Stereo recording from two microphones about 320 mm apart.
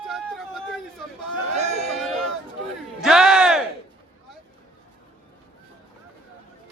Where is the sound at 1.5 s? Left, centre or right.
Right.